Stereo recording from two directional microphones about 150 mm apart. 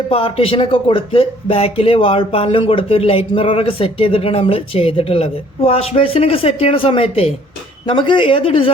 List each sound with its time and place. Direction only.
0.1 s speech: 40° left (ahead or behind)